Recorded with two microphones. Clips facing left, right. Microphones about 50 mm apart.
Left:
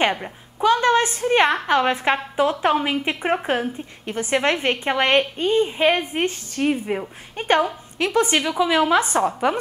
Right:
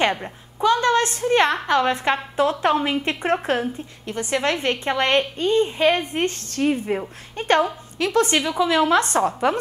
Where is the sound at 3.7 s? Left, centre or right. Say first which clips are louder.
Left 1 dB; left.